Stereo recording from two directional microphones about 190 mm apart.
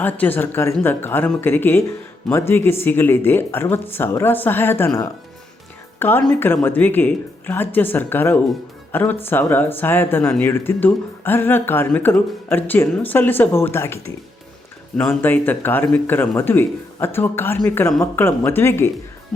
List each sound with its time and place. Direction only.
0.0 s speech: 10° left (ahead or behind)